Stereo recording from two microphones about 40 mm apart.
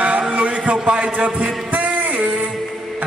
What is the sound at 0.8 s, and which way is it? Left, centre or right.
Speech, centre.